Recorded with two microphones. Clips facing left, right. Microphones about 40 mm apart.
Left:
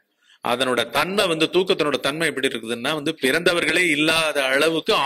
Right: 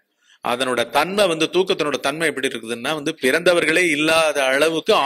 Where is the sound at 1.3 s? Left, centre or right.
Centre.